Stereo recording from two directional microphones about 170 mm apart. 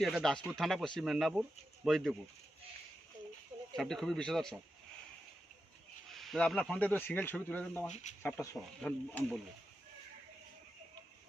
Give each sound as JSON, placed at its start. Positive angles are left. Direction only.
{"t": 0.0, "sound": "speech", "side_deg": 0}
{"t": 3.8, "sound": "speech", "side_deg": 0}
{"t": 6.1, "sound": "speech", "side_deg": 0}
{"t": 8.1, "sound": "speech", "side_deg": 45}
{"t": 8.8, "sound": "speech", "side_deg": 5}